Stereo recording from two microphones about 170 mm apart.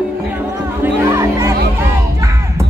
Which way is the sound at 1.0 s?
20° right (ahead or behind).